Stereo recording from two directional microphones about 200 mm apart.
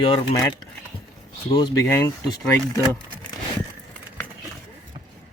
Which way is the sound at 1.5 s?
20° left (ahead or behind).